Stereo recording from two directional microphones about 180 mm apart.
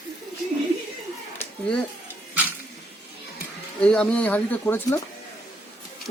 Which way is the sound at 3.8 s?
5° left (ahead or behind).